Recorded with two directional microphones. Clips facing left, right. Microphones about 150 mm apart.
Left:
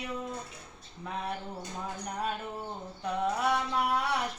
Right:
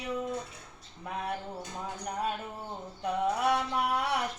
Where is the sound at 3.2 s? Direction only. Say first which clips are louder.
Right 1 dB; 15° right (ahead or behind).